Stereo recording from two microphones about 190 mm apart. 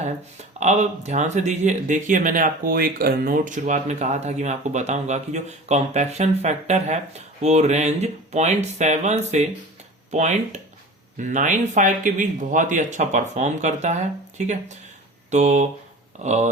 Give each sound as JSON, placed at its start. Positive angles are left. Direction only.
{"t": 0.6, "sound": "speech", "side_deg": -35}